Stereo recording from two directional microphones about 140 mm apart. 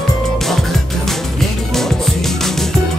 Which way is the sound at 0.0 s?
Centre (ahead or behind).